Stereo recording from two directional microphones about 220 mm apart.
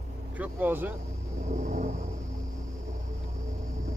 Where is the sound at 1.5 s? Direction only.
35° right (ahead or behind).